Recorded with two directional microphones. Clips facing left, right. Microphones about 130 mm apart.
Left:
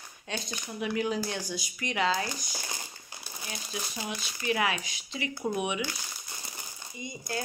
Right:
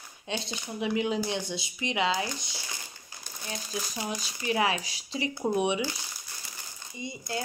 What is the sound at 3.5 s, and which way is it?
Speech, 35° right (ahead or behind).